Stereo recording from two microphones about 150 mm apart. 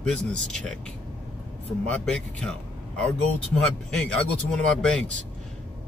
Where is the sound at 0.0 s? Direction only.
5° left (ahead or behind).